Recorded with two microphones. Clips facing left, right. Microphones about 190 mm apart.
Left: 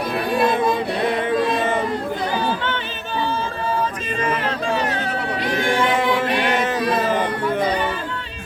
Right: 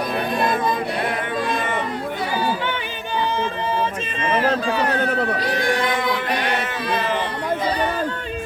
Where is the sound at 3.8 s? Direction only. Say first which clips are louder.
Left 1 dB; 25° right (ahead or behind).